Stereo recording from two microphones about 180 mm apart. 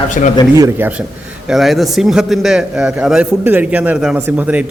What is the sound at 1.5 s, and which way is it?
A man's voice, centre (ahead or behind).